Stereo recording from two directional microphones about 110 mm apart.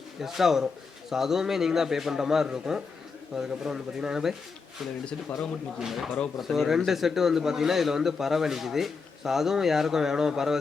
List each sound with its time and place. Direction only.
0.2 s speech: 5° right (ahead or behind)
5.8 s speech: 5° right (ahead or behind)